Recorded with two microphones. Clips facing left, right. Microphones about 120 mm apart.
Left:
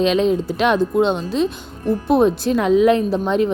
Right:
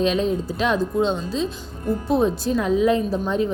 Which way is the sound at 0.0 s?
85° left.